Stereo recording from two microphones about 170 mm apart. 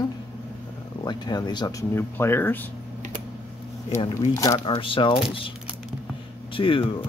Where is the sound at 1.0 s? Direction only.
25° left (ahead or behind).